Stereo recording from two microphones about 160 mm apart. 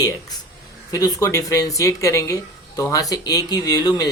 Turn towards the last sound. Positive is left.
turn(degrees=25)  # may be behind; listen again after turning